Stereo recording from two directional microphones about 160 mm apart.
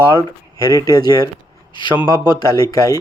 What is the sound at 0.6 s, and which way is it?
Speech, 20° left (ahead or behind).